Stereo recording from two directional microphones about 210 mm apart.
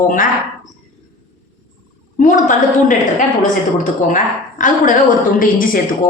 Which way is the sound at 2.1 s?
40° left (ahead or behind).